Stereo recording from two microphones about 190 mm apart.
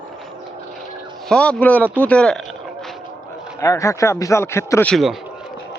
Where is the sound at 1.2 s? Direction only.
5° left (ahead or behind).